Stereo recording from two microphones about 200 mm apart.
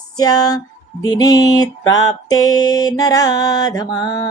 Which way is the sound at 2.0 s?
20° left (ahead or behind).